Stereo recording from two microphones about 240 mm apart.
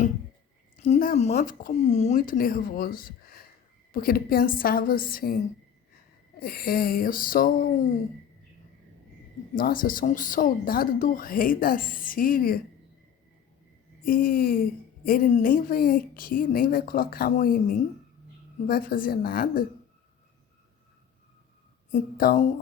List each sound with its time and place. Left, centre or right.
0.8 s speech: left
6.4 s speech: left
9.6 s speech: left
14.0 s speech: left
21.9 s speech: left